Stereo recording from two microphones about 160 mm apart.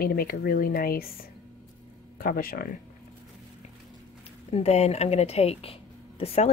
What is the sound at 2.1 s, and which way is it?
Speech, 65° left (ahead or behind).